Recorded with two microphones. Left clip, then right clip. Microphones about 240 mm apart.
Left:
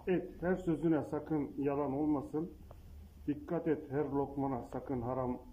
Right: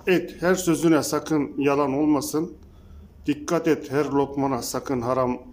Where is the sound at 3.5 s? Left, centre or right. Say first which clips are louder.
Right 13 dB; right.